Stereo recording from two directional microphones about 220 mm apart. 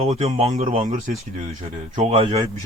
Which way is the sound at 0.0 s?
30° right (ahead or behind).